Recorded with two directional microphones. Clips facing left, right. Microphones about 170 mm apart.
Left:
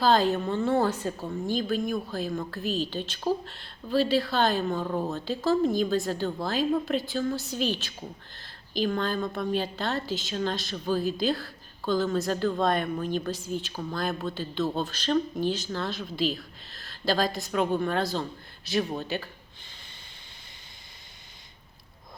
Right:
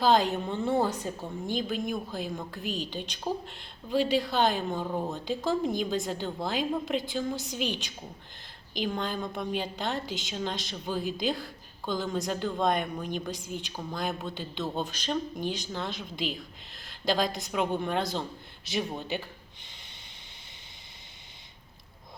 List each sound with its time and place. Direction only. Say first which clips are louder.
0.0 s a woman's voice: left 1 dB; 15° right (ahead or behind)
0.9 s a woman's voice: left 3 dB; 5° left (ahead or behind)
1.5 s a woman's voice: left 3 dB; 20° right (ahead or behind)